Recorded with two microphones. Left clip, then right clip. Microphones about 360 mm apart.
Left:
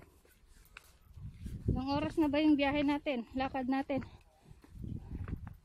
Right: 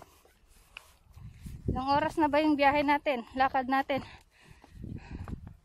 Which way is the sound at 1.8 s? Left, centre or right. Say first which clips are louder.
Right 7 dB; centre.